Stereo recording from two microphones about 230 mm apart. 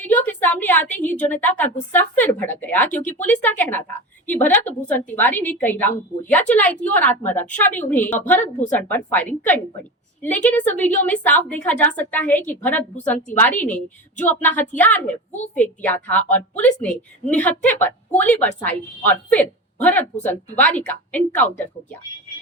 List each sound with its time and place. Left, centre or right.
0.0 s a sound: centre
1.0 s a woman's voice: centre
8.5 s a woman's voice: left
8.9 s a woman's voice: centre